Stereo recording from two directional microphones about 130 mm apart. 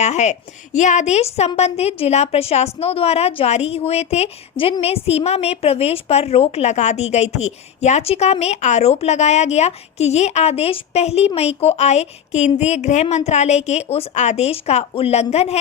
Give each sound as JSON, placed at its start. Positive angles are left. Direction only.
{"t": 0.0, "sound": "a woman's voice", "side_deg": 60}